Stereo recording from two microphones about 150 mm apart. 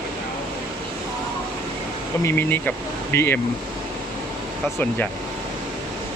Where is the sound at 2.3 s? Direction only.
15° left (ahead or behind).